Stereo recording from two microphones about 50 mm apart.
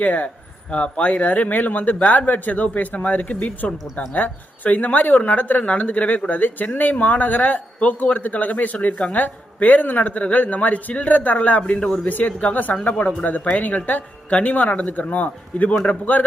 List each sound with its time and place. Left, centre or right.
0.0 s speech: left